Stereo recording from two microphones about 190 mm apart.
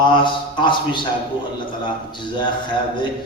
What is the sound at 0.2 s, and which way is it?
Speech, 25° left (ahead or behind).